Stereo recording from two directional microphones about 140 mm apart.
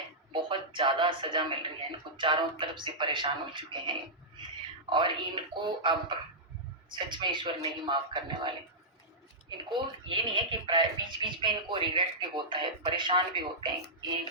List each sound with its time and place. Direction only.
0.4 s speech: 35° right (ahead or behind)